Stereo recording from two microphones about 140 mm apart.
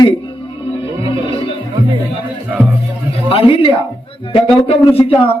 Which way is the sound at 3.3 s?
40° left (ahead or behind).